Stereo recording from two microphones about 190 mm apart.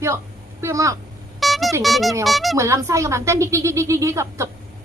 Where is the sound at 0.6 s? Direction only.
15° right (ahead or behind).